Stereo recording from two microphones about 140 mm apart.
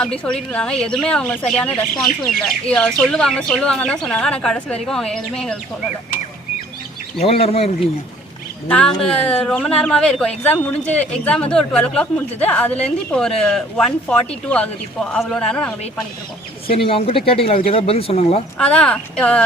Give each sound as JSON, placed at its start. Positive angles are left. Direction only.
{"t": 0.0, "sound": "speech", "side_deg": 5}
{"t": 7.2, "sound": "speech", "side_deg": 45}
{"t": 8.6, "sound": "speech", "side_deg": 10}
{"t": 16.6, "sound": "speech", "side_deg": 40}
{"t": 18.6, "sound": "speech", "side_deg": 10}